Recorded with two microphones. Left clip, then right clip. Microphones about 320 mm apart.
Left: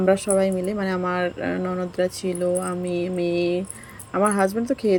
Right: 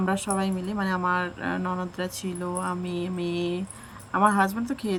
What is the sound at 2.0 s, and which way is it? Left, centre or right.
Speech, centre.